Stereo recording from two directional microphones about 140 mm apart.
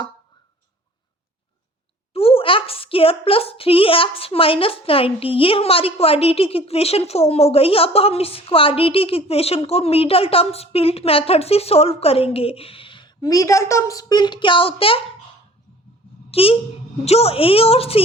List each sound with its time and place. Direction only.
2.1 s a woman's voice: 45° left (ahead or behind)
16.3 s a woman's voice: 40° left (ahead or behind)